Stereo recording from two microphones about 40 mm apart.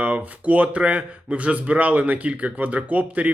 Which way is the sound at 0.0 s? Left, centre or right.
Right.